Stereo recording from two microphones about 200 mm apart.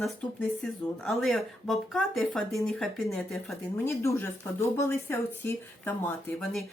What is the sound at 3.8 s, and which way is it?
Speech, 15° left (ahead or behind).